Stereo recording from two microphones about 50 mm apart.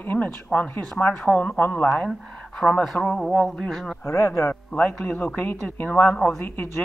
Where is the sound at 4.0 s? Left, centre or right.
Left.